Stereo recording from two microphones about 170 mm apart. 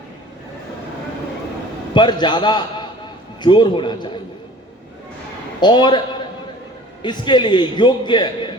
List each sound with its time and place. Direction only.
1.9 s a man's voice: 25° left (ahead or behind)
5.5 s a man's voice: 25° left (ahead or behind)
7.0 s a man's voice: 25° left (ahead or behind)